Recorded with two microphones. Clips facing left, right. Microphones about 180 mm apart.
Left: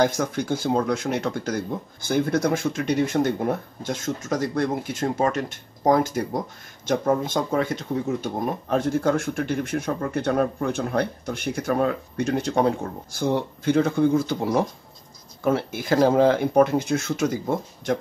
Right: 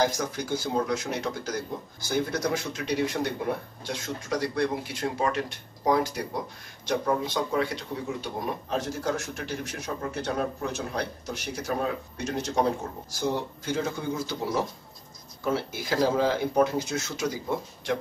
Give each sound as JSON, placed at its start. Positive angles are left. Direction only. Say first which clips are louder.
{"t": 0.0, "sound": "speech", "louder": "left 5 dB", "side_deg": 55}